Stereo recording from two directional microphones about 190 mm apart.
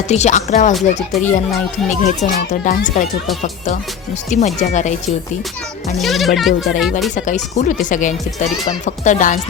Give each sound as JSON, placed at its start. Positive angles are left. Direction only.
{"t": 0.1, "sound": "speech", "side_deg": 40}
{"t": 4.3, "sound": "speech", "side_deg": 40}
{"t": 6.0, "sound": "speech", "side_deg": 0}
{"t": 7.3, "sound": "speech", "side_deg": 40}